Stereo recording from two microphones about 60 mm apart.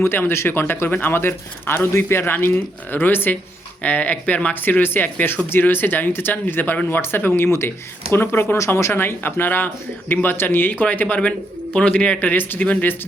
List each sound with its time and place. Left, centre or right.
0.0 s speech: left
8.5 s speech: left
8.9 s speech: left; by 12.2 s centre
12.2 s speech: left